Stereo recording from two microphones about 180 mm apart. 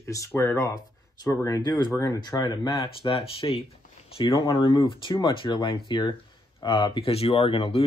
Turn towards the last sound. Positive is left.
turn(degrees=30)  # may be behind; listen again after turning